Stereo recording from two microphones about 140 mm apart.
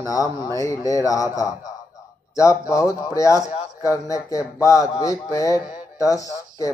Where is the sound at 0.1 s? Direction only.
25° left (ahead or behind).